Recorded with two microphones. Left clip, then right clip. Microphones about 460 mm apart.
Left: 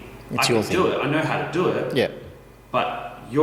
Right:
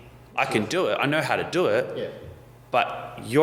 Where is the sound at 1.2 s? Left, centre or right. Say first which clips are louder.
Left 1 dB; right.